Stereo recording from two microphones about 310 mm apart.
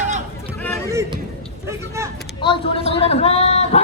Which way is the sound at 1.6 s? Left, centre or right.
Centre.